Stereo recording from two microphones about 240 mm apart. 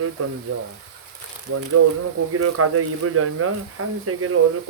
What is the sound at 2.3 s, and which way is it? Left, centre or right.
Speech, right.